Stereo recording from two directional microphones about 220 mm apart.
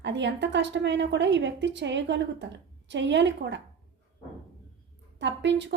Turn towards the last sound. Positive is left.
turn(degrees=-55)  # may be behind; listen again after turning